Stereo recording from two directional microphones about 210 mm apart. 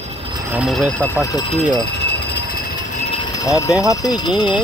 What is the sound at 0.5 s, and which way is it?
Speech, centre (ahead or behind).